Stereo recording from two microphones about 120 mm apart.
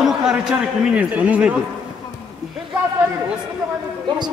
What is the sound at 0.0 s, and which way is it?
A man's voice, 5° right (ahead or behind).